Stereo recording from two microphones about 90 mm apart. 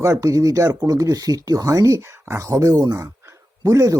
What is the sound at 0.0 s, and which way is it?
Speech, 35° right (ahead or behind).